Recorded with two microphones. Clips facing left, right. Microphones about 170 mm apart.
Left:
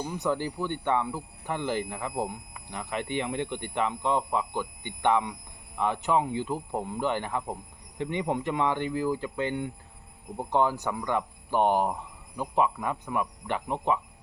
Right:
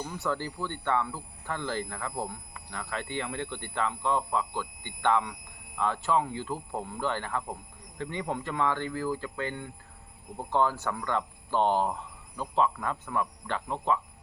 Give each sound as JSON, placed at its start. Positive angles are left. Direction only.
{"t": 0.0, "sound": "speech", "side_deg": 15}